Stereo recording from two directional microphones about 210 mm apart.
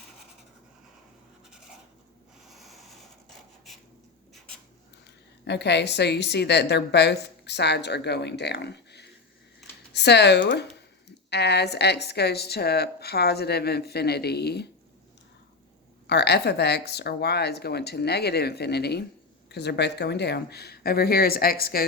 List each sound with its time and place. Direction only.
2.5 s a sound: centre (ahead or behind)
5.5 s a woman's voice: 55° left (ahead or behind)
16.0 s a woman's voice: 55° left (ahead or behind)